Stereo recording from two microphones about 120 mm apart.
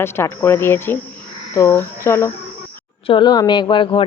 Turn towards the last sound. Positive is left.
turn(degrees=45)  # may be behind; listen again after turning